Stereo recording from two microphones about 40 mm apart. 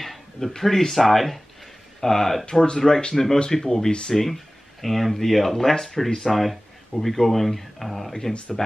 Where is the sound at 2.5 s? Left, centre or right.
Centre.